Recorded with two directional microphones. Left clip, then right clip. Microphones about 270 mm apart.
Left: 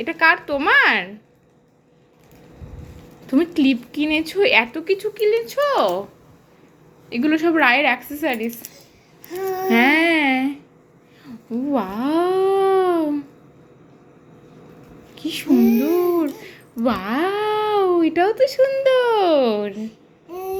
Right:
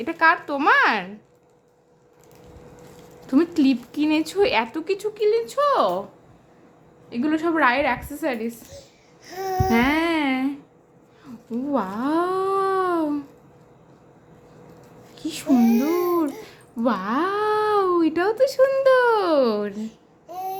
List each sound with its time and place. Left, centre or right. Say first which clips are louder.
0.0 s speech: left 2 dB; centre
3.2 s speech: left 2 dB; centre
7.1 s a woman's voice: left 4 dB; centre
9.6 s speech: left 6 dB; centre
11.7 s babbling: left 2 dB; centre
15.1 s speech: left 3 dB; centre
16.0 s speech: left 3 dB; centre